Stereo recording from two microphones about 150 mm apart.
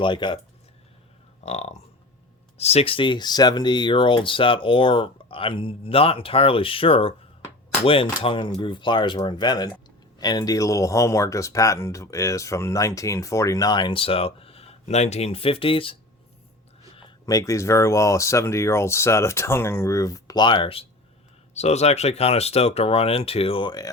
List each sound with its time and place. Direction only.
0.0 s speech: 30° left (ahead or behind)
1.5 s speech: 50° left (ahead or behind)
17.2 s speech: 20° left (ahead or behind)
21.5 s speech: 45° left (ahead or behind); by 23.9 s 30° left (ahead or behind)